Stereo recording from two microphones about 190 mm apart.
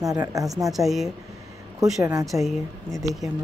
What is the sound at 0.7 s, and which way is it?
Speech, centre (ahead or behind).